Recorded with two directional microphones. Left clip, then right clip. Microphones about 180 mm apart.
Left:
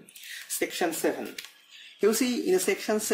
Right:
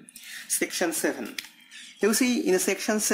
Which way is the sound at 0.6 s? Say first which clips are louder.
Right 1 dB; 25° right (ahead or behind).